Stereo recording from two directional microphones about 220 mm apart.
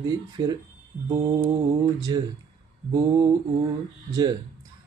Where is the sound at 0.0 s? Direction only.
15° right (ahead or behind).